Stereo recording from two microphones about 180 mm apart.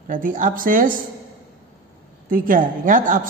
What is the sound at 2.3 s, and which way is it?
Speech, 50° right (ahead or behind).